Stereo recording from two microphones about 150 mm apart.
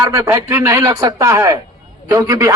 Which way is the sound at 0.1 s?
20° right (ahead or behind).